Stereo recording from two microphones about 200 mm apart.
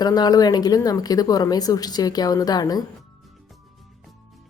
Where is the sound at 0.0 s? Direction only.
20° left (ahead or behind).